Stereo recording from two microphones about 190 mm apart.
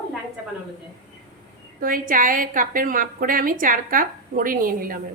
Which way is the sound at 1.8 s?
45° right (ahead or behind).